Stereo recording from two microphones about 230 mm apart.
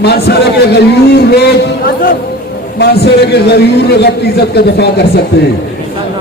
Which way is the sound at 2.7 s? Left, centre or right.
Left.